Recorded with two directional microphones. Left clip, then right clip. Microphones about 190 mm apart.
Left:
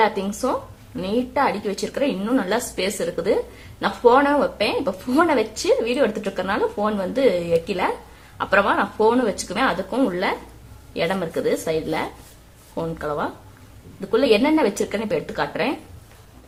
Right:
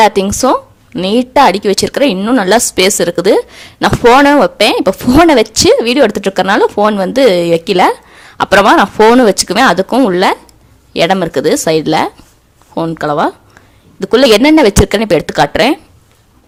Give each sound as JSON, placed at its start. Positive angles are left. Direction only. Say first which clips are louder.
{"t": 0.0, "sound": "a woman's voice", "louder": "right 12 dB", "side_deg": -50}